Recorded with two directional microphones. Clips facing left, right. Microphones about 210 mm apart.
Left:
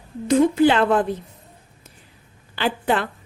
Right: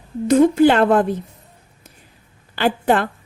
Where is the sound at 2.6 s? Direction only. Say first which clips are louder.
Right 4 dB; 45° right (ahead or behind).